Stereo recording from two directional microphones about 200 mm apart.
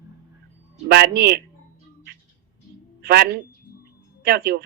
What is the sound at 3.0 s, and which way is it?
Speech, 50° right (ahead or behind).